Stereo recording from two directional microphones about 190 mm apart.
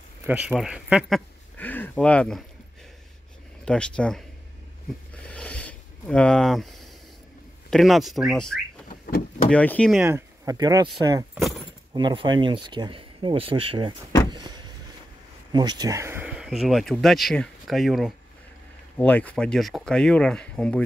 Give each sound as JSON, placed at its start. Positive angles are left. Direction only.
{"t": 0.2, "sound": "speech", "side_deg": -10}
{"t": 3.6, "sound": "speech", "side_deg": 5}
{"t": 5.3, "sound": "a sound", "side_deg": 5}
{"t": 7.7, "sound": "speech", "side_deg": 0}
{"t": 8.8, "sound": "a sound", "side_deg": 40}
{"t": 9.5, "sound": "speech", "side_deg": 5}
{"t": 10.0, "sound": "speech", "side_deg": -15}
{"t": 14.3, "sound": "vehicle", "side_deg": -25}
{"t": 15.5, "sound": "speech", "side_deg": -20}